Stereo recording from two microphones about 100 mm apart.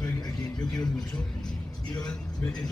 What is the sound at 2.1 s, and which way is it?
Speech, 10° left (ahead or behind).